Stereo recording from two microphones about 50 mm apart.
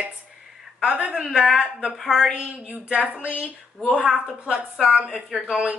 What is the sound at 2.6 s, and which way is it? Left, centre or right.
Speech, right.